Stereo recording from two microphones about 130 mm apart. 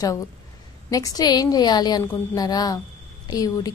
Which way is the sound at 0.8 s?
25° left (ahead or behind).